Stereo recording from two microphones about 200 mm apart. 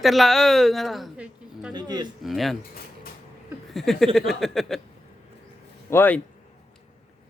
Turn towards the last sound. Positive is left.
turn(degrees=10)  # may be behind; listen again after turning